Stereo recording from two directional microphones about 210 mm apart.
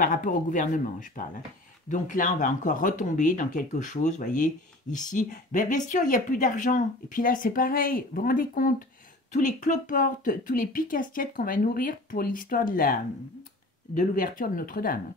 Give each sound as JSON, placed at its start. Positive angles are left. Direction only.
{"t": 0.0, "sound": "speech", "side_deg": 40}